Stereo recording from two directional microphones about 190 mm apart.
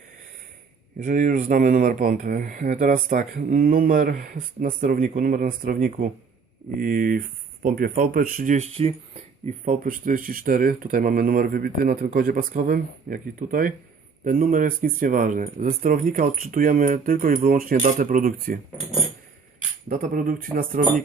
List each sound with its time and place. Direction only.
1.0 s speech: 40° right (ahead or behind)
19.9 s speech: 45° right (ahead or behind)